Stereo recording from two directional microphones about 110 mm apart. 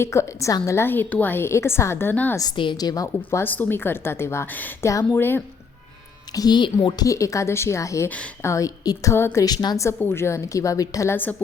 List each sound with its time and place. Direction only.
0.0 s a woman's voice: 25° left (ahead or behind)
2.6 s speech: 45° left (ahead or behind)
3.2 s a woman's voice: 15° left (ahead or behind)
6.3 s speech: 40° left (ahead or behind)
7.1 s a woman's voice: 30° left (ahead or behind)
9.1 s a woman's voice: 20° left (ahead or behind)
9.4 s speech: 40° left (ahead or behind)
9.8 s a woman's voice: 20° left (ahead or behind)
11.1 s a woman's voice: 15° left (ahead or behind)